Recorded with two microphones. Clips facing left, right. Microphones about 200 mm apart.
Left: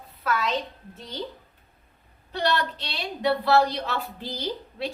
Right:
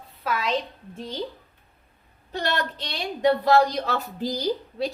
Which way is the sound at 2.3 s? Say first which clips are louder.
Left 1 dB; 45° right (ahead or behind).